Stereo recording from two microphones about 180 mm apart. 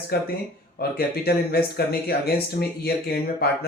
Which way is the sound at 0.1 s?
60° left (ahead or behind).